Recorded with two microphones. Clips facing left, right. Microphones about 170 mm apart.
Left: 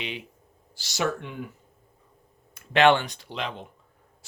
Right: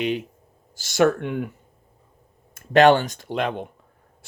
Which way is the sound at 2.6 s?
40° right (ahead or behind).